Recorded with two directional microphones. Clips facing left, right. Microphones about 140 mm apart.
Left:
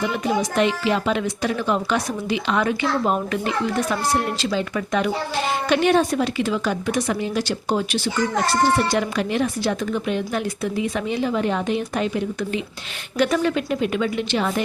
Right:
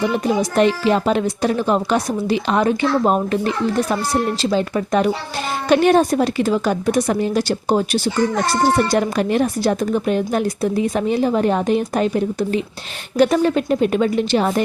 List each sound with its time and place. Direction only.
0.5 s speech: 40° right (ahead or behind)